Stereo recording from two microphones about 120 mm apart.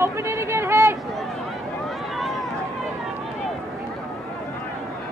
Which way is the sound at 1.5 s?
Centre (ahead or behind).